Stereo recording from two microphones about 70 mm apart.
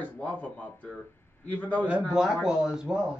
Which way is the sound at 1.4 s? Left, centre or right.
Left.